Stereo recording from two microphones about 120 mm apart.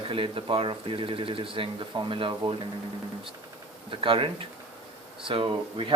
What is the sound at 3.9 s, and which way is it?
Speech, 45° right (ahead or behind).